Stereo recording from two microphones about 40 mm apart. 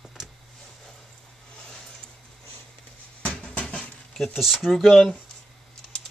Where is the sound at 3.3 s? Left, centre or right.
Centre.